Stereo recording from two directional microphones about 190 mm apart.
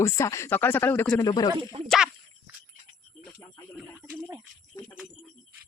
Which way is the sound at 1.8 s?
Centre (ahead or behind).